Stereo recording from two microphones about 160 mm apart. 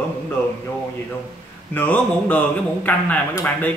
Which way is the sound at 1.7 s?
10° left (ahead or behind).